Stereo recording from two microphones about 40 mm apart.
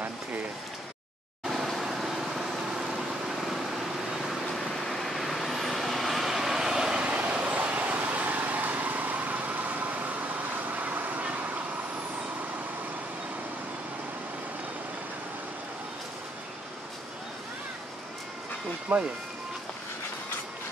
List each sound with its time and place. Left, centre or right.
1.8 s vehicle: centre
4.6 s vehicle: centre; by 11.6 s right
18.9 s speech: right